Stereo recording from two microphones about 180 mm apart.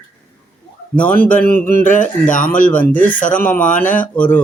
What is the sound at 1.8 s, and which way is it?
Speech, 45° left (ahead or behind).